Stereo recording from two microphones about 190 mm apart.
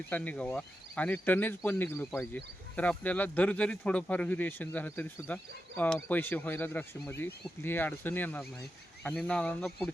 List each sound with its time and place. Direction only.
0.1 s speech: 10° left (ahead or behind)